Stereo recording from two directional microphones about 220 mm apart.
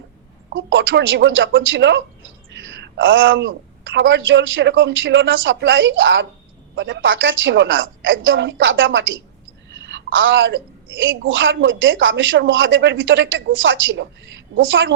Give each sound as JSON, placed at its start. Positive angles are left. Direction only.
{"t": 0.5, "sound": "speech", "side_deg": -60}